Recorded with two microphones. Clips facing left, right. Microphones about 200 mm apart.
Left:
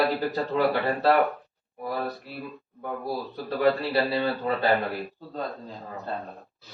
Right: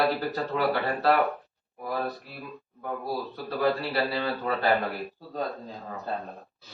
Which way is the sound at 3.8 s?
20° left (ahead or behind).